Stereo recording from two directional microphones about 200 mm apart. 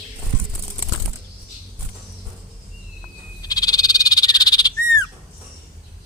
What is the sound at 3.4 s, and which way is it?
Frog, 20° left (ahead or behind).